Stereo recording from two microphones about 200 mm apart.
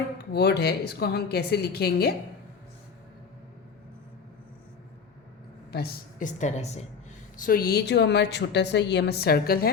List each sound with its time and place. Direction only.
0.3 s a woman's voice: 55° left (ahead or behind)
5.7 s a woman's voice: 45° left (ahead or behind)
7.3 s a woman's voice: 45° left (ahead or behind)